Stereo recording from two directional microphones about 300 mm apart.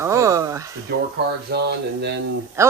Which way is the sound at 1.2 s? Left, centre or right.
Right.